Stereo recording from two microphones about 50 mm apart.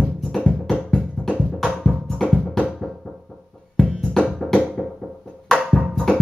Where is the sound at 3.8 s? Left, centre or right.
Centre.